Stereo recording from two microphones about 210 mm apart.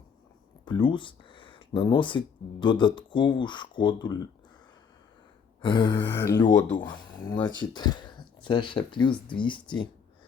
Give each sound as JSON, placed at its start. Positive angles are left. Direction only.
{"t": 0.6, "sound": "speech", "side_deg": 20}
{"t": 5.6, "sound": "speech", "side_deg": 20}
{"t": 6.5, "sound": "speech", "side_deg": 60}
{"t": 7.7, "sound": "speech", "side_deg": 20}